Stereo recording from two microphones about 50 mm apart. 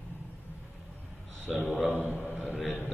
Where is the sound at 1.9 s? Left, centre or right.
Left.